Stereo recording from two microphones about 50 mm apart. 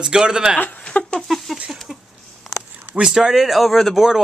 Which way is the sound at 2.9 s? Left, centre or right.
Centre.